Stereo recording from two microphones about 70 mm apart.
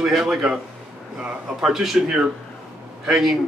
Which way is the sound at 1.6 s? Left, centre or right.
Centre.